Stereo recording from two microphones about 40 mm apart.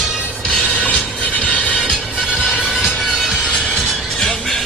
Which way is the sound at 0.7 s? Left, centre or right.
Left.